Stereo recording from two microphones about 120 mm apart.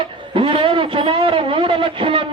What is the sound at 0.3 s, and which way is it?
A man's voice, 45° right (ahead or behind).